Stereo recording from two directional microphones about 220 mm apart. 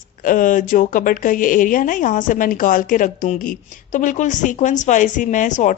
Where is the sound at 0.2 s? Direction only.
35° left (ahead or behind).